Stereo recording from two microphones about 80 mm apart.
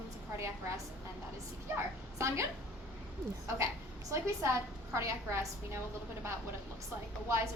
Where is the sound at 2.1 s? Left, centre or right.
Right.